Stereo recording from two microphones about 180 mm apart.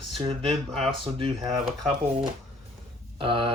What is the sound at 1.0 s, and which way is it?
Speech, 30° right (ahead or behind).